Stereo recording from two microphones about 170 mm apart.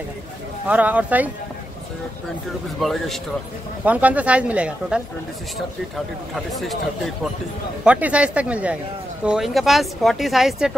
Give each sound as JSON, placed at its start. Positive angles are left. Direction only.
{"t": 0.7, "sound": "speech", "side_deg": -10}
{"t": 2.8, "sound": "a woman's voice", "side_deg": 0}
{"t": 3.8, "sound": "speech", "side_deg": -10}
{"t": 7.8, "sound": "a woman's voice", "side_deg": -5}